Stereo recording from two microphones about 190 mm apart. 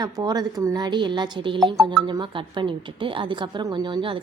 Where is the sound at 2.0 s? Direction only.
25° right (ahead or behind).